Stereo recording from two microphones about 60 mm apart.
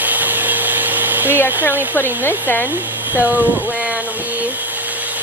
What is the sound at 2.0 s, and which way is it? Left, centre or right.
Speech, left.